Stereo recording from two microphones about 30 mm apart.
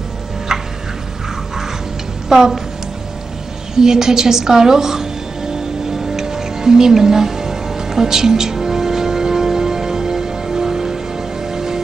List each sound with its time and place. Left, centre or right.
0.5 s tick-tock: centre
2.2 s speech: centre
3.7 s music: centre